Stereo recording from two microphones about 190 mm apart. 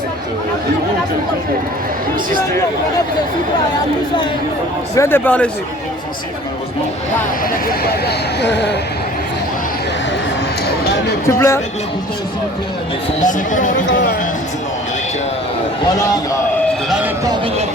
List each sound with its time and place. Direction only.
4.9 s speech: 10° left (ahead or behind)
7.7 s speech: 60° left (ahead or behind)
11.3 s speech: 15° left (ahead or behind)
13.2 s speech: 45° left (ahead or behind)